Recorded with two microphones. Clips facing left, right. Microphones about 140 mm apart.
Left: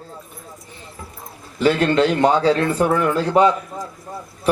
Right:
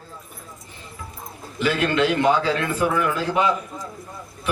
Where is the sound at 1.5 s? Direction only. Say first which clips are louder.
Left 5 dB; 35° left (ahead or behind).